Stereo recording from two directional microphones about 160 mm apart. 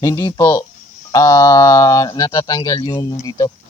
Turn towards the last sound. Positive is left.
turn(degrees=20)  # may be behind; listen again after turning